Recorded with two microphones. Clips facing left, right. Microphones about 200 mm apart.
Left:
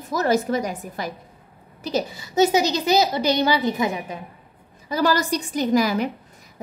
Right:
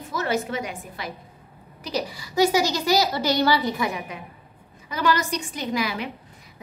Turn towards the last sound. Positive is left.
turn(degrees=40)  # may be behind; listen again after turning